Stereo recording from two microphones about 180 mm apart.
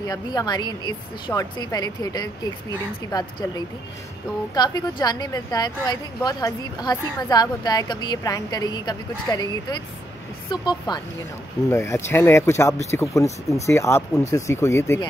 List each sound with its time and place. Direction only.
0.0 s a woman's voice: 20° left (ahead or behind)